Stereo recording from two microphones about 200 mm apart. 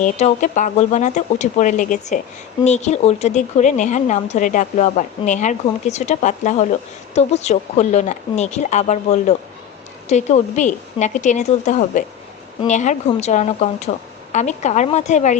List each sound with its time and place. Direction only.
0.0 s speech: 35° left (ahead or behind)